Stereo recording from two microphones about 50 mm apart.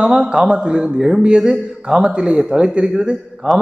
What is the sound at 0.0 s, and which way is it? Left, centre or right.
A man's voice, centre.